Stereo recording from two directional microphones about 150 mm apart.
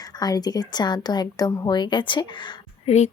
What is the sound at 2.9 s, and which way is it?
Speech, 50° left (ahead or behind).